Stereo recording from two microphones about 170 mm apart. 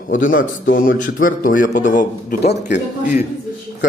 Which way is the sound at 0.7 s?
55° left (ahead or behind).